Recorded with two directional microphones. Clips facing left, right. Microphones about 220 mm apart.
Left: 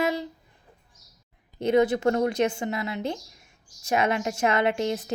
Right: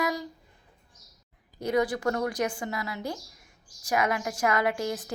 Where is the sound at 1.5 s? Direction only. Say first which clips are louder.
Left 5 dB; 25° left (ahead or behind).